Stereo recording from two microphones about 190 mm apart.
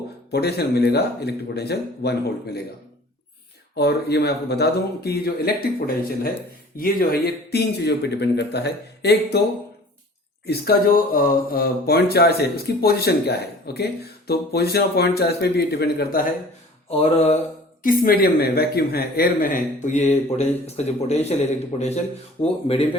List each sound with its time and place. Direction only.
0.3 s speech: 60° left (ahead or behind)
3.8 s speech: 60° left (ahead or behind)
10.4 s speech: 55° left (ahead or behind)
16.9 s speech: 30° left (ahead or behind)
17.8 s speech: 50° left (ahead or behind); by 22.9 s 30° left (ahead or behind)